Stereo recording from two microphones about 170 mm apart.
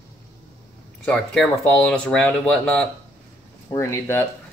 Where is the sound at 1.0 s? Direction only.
5° left (ahead or behind).